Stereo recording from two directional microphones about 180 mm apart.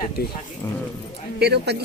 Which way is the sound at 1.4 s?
65° right (ahead or behind).